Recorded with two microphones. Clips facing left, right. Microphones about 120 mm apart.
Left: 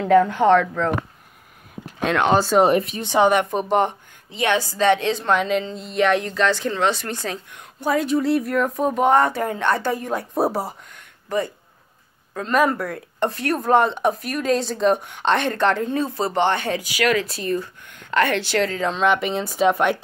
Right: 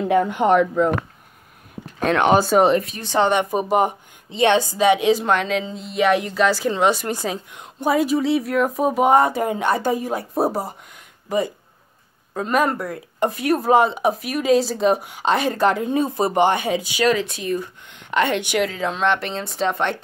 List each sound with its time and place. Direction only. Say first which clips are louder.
0.0 s speech: left 2 dB; 15° right (ahead or behind)
2.0 s speech: right 2 dB; centre (ahead or behind)
2.8 s speech: left 1 dB; 20° left (ahead or behind)
3.3 s speech: left 1 dB; 5° right (ahead or behind)
4.3 s speech: right 4 dB; 25° right (ahead or behind)
10.1 s speech: even; centre (ahead or behind)
10.9 s a sound: right 2 dB; 15° right (ahead or behind)
12.5 s speech: left 1 dB; centre (ahead or behind)
13.3 s speech: right 2 dB; 10° right (ahead or behind)
16.9 s speech: right 1 dB; 25° right (ahead or behind)
17.4 s speech: even; 15° right (ahead or behind)
18.7 s speech: left 1 dB; 5° right (ahead or behind)